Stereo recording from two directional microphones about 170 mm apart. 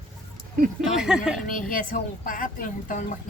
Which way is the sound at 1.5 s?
55° left (ahead or behind).